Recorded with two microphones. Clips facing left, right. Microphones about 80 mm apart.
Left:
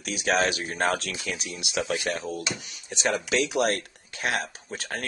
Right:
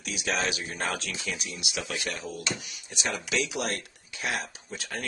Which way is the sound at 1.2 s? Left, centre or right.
Left.